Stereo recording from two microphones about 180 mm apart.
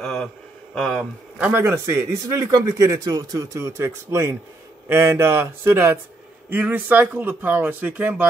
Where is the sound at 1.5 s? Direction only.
15° right (ahead or behind).